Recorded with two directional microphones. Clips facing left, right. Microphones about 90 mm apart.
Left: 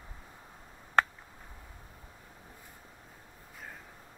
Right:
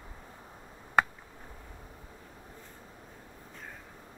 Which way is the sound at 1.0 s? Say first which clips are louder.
Right 1 dB; 5° right (ahead or behind).